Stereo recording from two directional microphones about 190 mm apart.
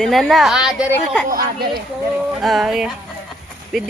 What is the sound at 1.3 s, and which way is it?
Speech, 50° right (ahead or behind).